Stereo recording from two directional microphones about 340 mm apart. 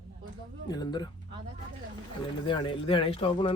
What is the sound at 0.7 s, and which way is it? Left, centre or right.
Speech, centre.